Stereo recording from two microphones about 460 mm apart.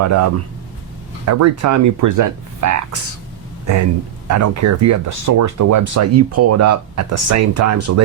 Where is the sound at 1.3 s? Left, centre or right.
Right.